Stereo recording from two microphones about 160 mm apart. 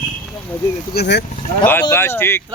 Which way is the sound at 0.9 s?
90° left.